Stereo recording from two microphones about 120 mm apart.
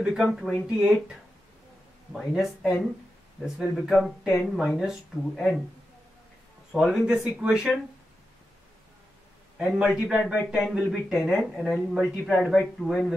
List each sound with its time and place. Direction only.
0.0 s speech: centre (ahead or behind)
2.1 s speech: centre (ahead or behind)
6.7 s speech: centre (ahead or behind)
9.6 s speech: centre (ahead or behind)